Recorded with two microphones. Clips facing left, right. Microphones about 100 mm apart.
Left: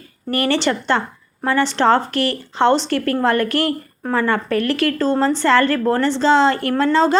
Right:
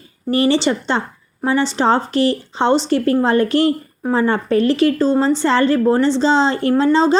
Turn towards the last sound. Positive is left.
turn(degrees=-20)  # may be behind; listen again after turning